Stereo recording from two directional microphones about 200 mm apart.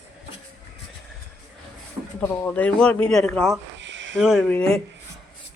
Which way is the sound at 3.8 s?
65° right (ahead or behind).